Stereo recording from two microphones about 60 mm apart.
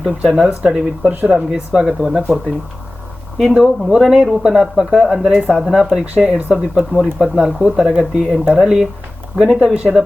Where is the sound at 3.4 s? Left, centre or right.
Centre.